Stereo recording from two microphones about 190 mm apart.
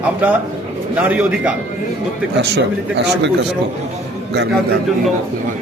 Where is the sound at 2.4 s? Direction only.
60° right (ahead or behind).